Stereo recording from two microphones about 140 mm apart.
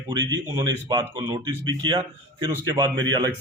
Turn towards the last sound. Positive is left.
turn(degrees=-30)  # may be behind; listen again after turning